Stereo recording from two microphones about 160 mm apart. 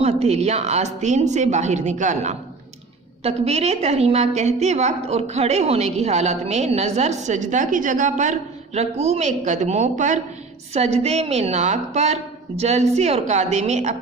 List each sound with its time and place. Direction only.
0.0 s a woman's voice: 40° right (ahead or behind)